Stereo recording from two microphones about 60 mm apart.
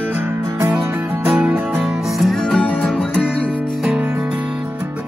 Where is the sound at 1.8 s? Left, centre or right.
Centre.